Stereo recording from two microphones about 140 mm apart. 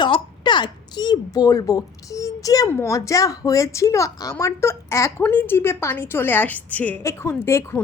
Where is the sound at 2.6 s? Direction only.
20° left (ahead or behind).